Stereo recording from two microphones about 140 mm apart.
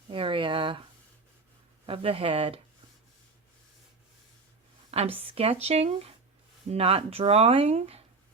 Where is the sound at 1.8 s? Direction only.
40° right (ahead or behind).